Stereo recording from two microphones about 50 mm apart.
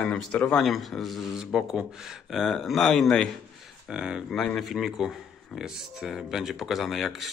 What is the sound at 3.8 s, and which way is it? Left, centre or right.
Speech, centre.